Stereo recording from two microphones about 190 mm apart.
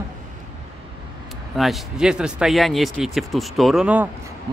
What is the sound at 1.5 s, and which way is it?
Speech, centre (ahead or behind).